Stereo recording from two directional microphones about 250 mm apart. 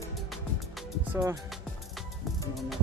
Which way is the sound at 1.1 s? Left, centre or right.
Centre.